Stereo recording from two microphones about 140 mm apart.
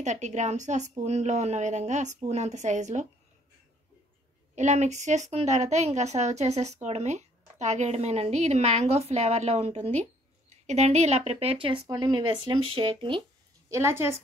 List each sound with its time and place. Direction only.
0.0 s a woman's voice: 55° right (ahead or behind)
4.6 s a woman's voice: 55° right (ahead or behind); by 13.2 s 35° right (ahead or behind)
13.7 s a woman's voice: 20° right (ahead or behind)